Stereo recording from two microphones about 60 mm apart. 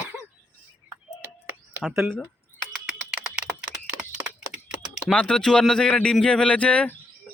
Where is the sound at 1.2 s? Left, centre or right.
Right.